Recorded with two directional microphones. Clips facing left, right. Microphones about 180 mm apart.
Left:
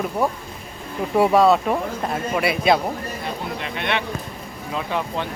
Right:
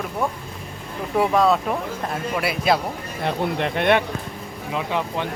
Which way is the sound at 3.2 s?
55° right (ahead or behind).